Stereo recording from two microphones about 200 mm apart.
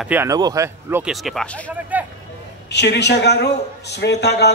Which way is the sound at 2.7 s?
60° left (ahead or behind).